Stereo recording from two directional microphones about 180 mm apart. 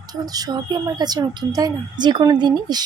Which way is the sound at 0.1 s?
20° right (ahead or behind).